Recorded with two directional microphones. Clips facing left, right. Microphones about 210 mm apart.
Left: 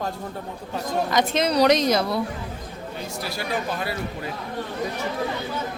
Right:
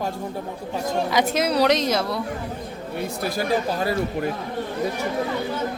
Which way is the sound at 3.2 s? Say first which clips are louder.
Right 5 dB; 50° right (ahead or behind).